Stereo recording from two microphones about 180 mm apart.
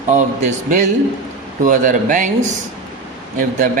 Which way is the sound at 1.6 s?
45° right (ahead or behind).